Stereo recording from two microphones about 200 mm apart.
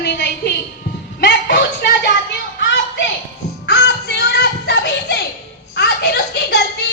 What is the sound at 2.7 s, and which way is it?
Music, 65° left (ahead or behind).